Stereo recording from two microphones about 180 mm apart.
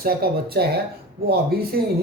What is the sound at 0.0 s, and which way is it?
Speech, 60° right (ahead or behind).